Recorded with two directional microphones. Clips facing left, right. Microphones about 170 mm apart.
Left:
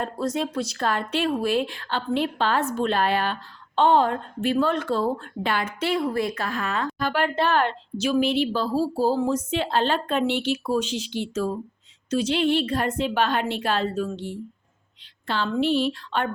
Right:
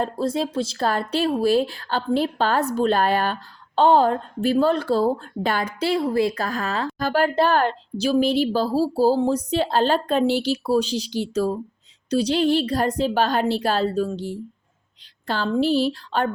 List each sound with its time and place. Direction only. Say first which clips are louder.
0.0 s a woman's voice: right 3 dB; 30° right (ahead or behind)